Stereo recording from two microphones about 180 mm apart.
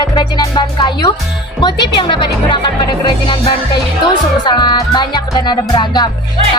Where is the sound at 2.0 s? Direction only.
25° left (ahead or behind).